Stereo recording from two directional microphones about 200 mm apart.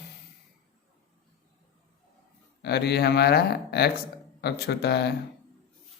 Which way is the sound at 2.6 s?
55° left (ahead or behind).